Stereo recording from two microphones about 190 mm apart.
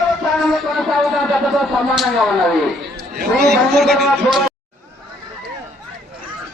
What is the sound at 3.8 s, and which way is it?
Speech, centre (ahead or behind).